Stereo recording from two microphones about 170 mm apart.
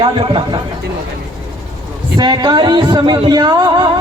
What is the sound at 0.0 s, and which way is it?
Speech, 30° right (ahead or behind).